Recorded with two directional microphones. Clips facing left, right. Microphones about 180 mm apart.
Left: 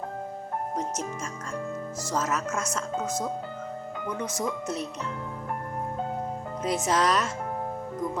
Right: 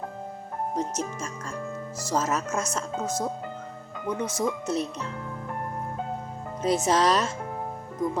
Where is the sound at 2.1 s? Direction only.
30° right (ahead or behind).